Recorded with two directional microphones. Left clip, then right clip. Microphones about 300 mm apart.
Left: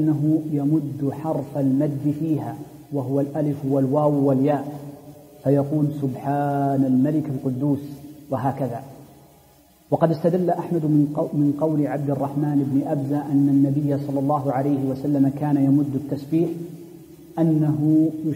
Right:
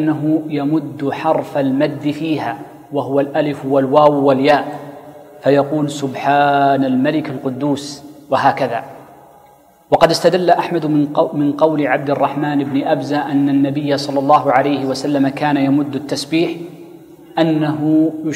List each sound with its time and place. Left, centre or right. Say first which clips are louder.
0.0 s a man's voice: right 5 dB; centre
2.9 s a man's voice: right 8 dB; right
3.9 s speech: right 11 dB; right
4.3 s a man's voice: right 9 dB; centre
6.1 s a man's voice: right 13 dB; centre
9.9 s a man's voice: right 9 dB; centre
17.4 s a man's voice: right 6 dB; centre